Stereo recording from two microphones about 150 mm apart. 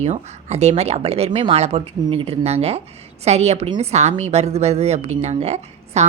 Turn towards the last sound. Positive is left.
turn(degrees=-45)  # may be behind; listen again after turning